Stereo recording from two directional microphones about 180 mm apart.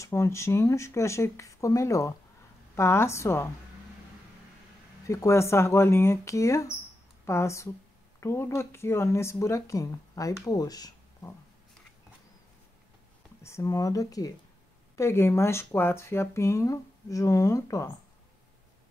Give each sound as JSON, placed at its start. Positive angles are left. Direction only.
{"t": 0.0, "sound": "speech", "side_deg": 15}
{"t": 5.0, "sound": "speech", "side_deg": 15}
{"t": 13.4, "sound": "speech", "side_deg": 15}